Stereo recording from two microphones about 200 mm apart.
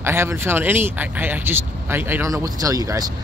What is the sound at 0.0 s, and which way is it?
Speech, 10° right (ahead or behind).